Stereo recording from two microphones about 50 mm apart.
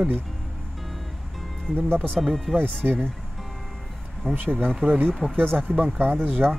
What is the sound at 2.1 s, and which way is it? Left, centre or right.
Speech, centre.